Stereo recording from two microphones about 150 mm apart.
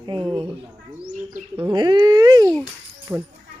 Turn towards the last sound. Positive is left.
turn(degrees=-15)  # may be behind; listen again after turning